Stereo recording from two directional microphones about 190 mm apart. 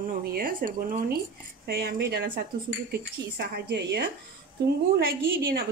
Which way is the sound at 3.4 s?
60° right (ahead or behind).